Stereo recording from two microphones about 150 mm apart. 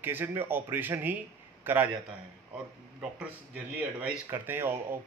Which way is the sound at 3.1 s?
10° right (ahead or behind).